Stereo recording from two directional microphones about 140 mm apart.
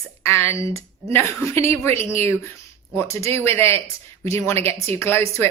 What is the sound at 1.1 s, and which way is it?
Speech, 20° left (ahead or behind).